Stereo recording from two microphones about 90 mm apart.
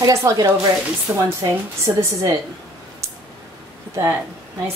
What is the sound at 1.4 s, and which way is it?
Speech, 30° right (ahead or behind).